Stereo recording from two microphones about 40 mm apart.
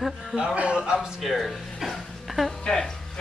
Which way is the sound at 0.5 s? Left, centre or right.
Right.